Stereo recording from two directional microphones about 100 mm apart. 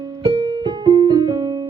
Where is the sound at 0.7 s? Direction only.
50° right (ahead or behind).